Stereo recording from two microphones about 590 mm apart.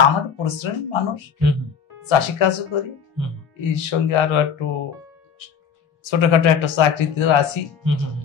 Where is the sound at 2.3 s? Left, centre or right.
Left.